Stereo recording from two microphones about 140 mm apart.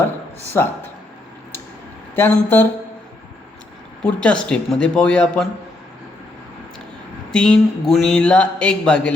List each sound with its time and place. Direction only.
0.6 s speech: 20° left (ahead or behind)
2.1 s speech: 15° left (ahead or behind)
4.0 s speech: 5° left (ahead or behind)
7.3 s speech: 5° left (ahead or behind)